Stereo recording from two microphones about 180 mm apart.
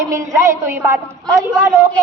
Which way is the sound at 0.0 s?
15° right (ahead or behind).